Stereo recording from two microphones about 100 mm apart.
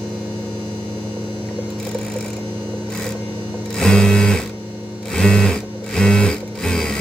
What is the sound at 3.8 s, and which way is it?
Sewing machine, 5° left (ahead or behind).